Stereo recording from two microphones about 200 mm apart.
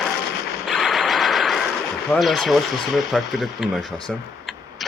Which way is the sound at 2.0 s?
Centre (ahead or behind).